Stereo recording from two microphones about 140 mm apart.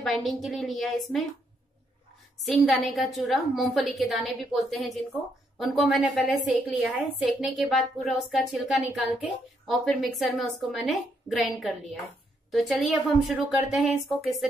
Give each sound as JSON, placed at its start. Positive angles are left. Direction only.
{"t": 0.0, "sound": "a woman's voice", "side_deg": 0}
{"t": 2.4, "sound": "a woman's voice", "side_deg": 0}